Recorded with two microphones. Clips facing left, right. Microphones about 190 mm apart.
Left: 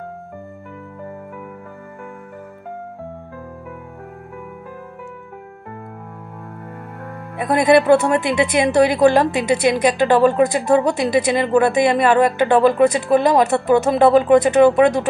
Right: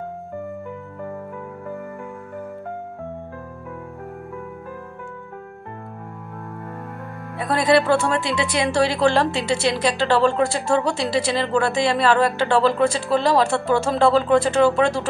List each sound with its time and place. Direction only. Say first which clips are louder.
7.3 s speech: left 4 dB; 20° left (ahead or behind)